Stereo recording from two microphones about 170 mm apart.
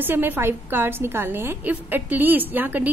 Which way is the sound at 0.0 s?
10° right (ahead or behind).